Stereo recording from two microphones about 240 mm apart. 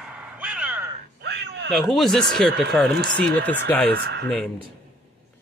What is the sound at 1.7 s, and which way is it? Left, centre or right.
Speech, centre.